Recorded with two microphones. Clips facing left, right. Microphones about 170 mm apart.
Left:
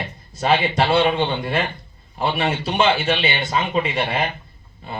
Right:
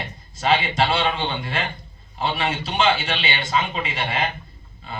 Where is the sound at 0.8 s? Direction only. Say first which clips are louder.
Left 4 dB; 55° left (ahead or behind).